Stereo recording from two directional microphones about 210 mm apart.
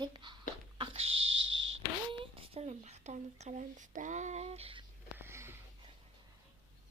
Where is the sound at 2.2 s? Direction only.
30° right (ahead or behind).